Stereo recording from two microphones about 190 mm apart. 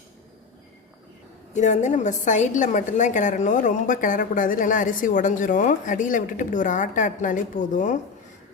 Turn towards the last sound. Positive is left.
turn(degrees=40)  # may be behind; listen again after turning